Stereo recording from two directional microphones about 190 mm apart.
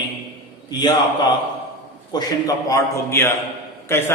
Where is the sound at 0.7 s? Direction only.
20° left (ahead or behind).